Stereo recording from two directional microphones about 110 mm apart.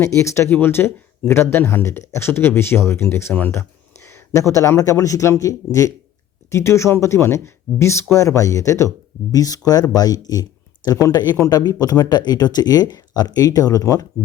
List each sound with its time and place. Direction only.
0.1 s speech: 25° left (ahead or behind)
4.0 s a sound: 20° left (ahead or behind)
4.5 s speech: 30° left (ahead or behind)